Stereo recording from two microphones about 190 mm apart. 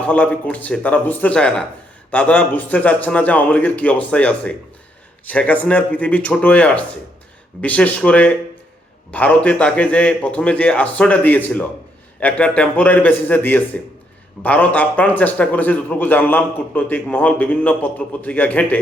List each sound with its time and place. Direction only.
0.1 s speech: 10° left (ahead or behind)